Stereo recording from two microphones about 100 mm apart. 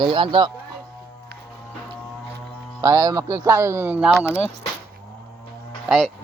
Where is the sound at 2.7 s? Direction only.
35° right (ahead or behind); by 4.1 s 15° right (ahead or behind).